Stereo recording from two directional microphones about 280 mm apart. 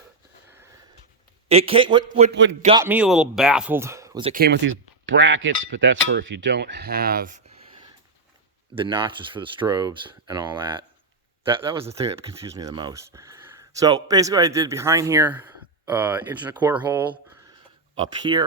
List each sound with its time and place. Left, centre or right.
1.5 s a man's voice: right
2.3 s a man's voice: right
2.7 s speech: centre
4.4 s speech: right
5.6 s cutlery: right
8.7 s speech: centre